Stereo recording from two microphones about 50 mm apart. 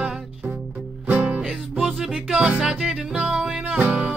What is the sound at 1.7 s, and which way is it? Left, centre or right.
Music, centre.